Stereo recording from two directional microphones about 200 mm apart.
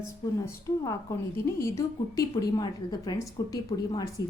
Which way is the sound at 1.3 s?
15° left (ahead or behind).